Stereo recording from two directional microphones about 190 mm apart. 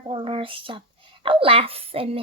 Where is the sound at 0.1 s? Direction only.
30° right (ahead or behind).